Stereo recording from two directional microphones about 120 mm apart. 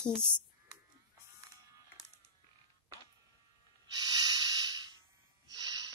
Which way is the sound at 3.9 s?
35° right (ahead or behind).